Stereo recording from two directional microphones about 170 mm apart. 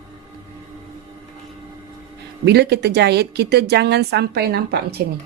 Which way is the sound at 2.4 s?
80° right.